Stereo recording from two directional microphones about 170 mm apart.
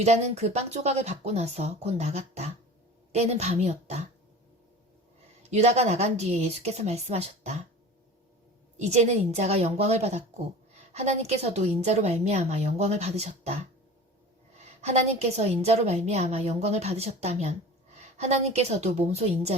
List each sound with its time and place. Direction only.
0.0 s a woman's voice: 40° right (ahead or behind)
5.4 s a woman's voice: 40° right (ahead or behind)
8.8 s a woman's voice: 40° right (ahead or behind)
14.8 s a woman's voice: 40° right (ahead or behind)